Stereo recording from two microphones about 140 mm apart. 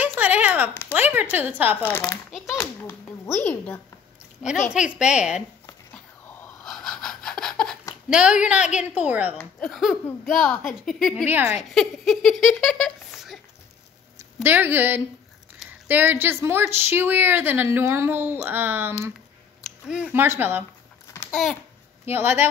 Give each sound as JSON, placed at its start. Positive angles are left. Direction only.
{"t": 0.0, "sound": "a sound", "side_deg": -10}
{"t": 0.9, "sound": "a woman's voice", "side_deg": -15}
{"t": 1.9, "sound": "a child's voice", "side_deg": 15}
{"t": 4.4, "sound": "a woman's voice", "side_deg": -5}
{"t": 6.6, "sound": "a sound", "side_deg": 5}
{"t": 8.1, "sound": "a woman's voice", "side_deg": -5}
{"t": 9.4, "sound": "a woman's voice", "side_deg": 0}
{"t": 11.2, "sound": "a woman's voice", "side_deg": -15}
{"t": 11.7, "sound": "speech", "side_deg": 0}
{"t": 14.1, "sound": "a woman's voice", "side_deg": -15}
{"t": 21.3, "sound": "babbling", "side_deg": 5}
{"t": 22.0, "sound": "a woman's voice", "side_deg": -15}